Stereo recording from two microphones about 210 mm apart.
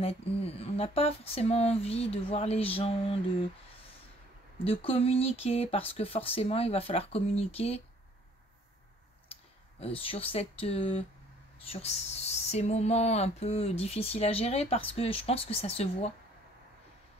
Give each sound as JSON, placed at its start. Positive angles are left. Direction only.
{"t": 0.6, "sound": "speech", "side_deg": 30}
{"t": 4.6, "sound": "speech", "side_deg": 25}
{"t": 9.8, "sound": "speech", "side_deg": 25}